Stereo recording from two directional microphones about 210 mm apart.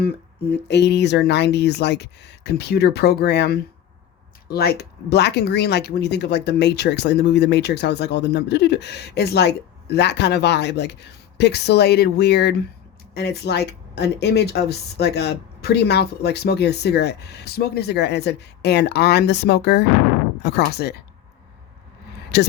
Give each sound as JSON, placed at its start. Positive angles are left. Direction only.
{"t": 0.5, "sound": "speech", "side_deg": 55}
{"t": 22.3, "sound": "speech", "side_deg": 55}